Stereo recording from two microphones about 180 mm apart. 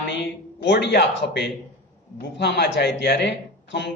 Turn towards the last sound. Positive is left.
turn(degrees=75)  # may be behind; listen again after turning